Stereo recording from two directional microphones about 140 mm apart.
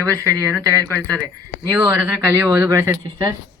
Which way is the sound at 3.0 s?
30° right (ahead or behind).